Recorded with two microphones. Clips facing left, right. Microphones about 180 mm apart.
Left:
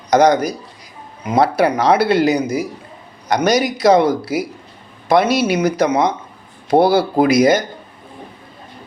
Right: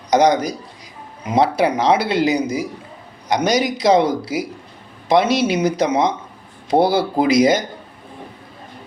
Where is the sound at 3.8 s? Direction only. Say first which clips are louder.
Left 3 dB; 50° left (ahead or behind).